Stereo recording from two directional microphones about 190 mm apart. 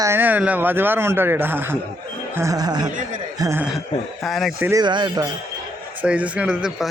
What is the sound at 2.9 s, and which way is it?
Speech, 40° right (ahead or behind).